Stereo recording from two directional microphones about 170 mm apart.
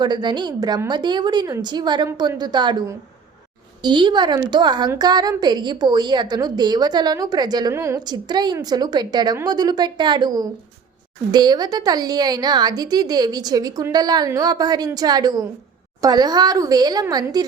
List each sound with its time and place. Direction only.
0.0 s a woman's voice: 25° right (ahead or behind)
3.8 s a woman's voice: 25° right (ahead or behind)